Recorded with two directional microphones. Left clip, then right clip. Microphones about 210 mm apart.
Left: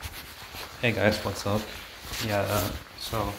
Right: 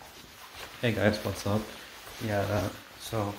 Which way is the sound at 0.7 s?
5° right (ahead or behind).